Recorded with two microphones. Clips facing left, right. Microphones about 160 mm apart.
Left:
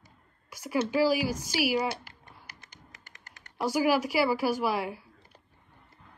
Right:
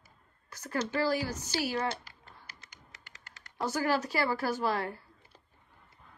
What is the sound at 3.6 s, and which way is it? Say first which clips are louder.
Speech: left 4 dB; 10° left (ahead or behind).